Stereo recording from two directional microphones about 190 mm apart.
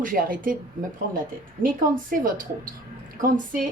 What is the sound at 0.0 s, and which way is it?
Speech, 45° right (ahead or behind).